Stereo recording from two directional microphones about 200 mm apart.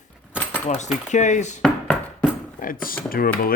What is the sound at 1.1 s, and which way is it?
Speech, 35° left (ahead or behind).